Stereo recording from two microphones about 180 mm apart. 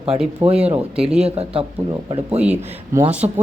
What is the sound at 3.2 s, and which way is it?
Speech, 20° right (ahead or behind).